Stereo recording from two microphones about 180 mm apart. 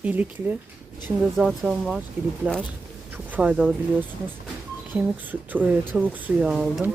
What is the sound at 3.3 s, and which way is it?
Speech, 5° right (ahead or behind).